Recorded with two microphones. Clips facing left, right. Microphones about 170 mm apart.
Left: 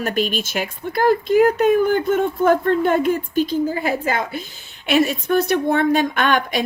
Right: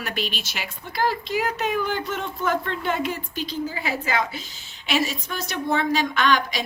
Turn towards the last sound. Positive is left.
turn(degrees=55)  # may be behind; listen again after turning